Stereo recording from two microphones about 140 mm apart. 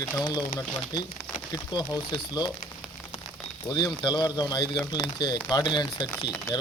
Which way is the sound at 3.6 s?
30° left (ahead or behind).